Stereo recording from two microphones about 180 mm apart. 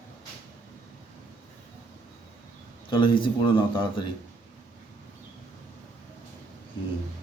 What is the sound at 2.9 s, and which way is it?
Speech, 30° left (ahead or behind).